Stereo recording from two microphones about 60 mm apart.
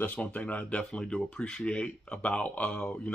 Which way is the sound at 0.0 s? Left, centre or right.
Left.